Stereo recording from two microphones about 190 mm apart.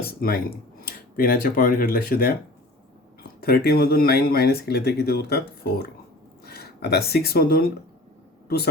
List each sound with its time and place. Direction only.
0.0 s a sound: 55° left (ahead or behind)
0.9 s speech: 50° left (ahead or behind)
3.4 s speech: 55° left (ahead or behind)